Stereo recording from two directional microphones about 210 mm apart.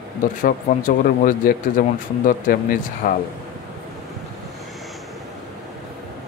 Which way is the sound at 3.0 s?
40° left (ahead or behind).